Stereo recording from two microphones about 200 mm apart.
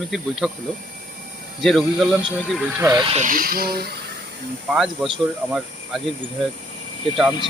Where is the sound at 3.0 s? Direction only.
35° right (ahead or behind); by 3.9 s 50° right (ahead or behind).